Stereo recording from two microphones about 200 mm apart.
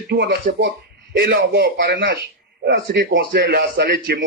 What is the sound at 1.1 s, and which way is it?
Speech, 55° right (ahead or behind).